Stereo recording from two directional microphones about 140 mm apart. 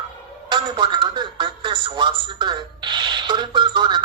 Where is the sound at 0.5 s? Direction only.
35° right (ahead or behind).